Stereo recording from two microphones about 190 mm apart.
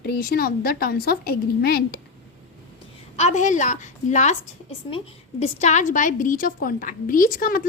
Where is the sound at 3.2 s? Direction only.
35° left (ahead or behind).